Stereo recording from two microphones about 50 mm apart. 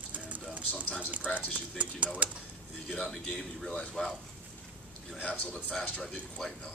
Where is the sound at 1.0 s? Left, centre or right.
Right.